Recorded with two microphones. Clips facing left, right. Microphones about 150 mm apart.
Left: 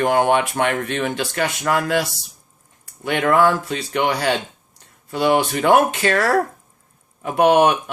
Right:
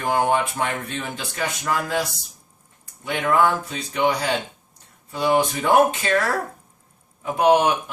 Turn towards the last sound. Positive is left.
turn(degrees=65)  # may be behind; listen again after turning